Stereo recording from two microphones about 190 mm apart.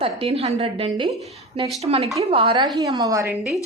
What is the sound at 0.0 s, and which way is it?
A woman's voice, 30° right (ahead or behind).